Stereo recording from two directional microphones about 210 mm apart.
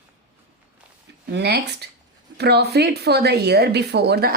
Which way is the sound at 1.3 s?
50° right (ahead or behind).